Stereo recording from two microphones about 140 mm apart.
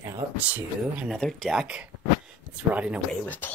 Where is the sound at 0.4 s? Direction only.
10° right (ahead or behind).